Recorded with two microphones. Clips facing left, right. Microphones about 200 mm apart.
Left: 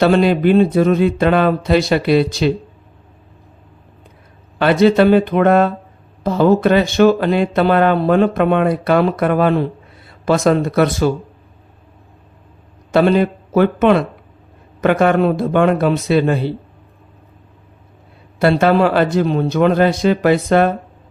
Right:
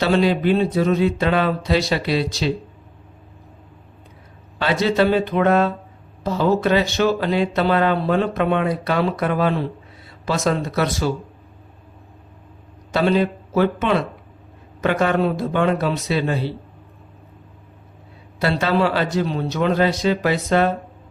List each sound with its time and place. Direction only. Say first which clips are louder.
0.0 s speech: left 5 dB; 55° left (ahead or behind)
4.6 s speech: left 7 dB; 55° left (ahead or behind)
12.9 s speech: left 5 dB; 55° left (ahead or behind)
18.3 s speech: left 6 dB; 55° left (ahead or behind)